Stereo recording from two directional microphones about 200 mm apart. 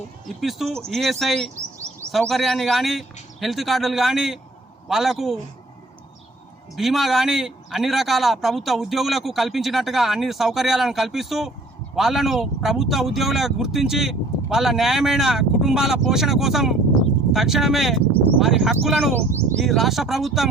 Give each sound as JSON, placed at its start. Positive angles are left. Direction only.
{"t": 0.8, "sound": "a man's voice", "side_deg": 0}
{"t": 6.7, "sound": "a man's voice", "side_deg": 0}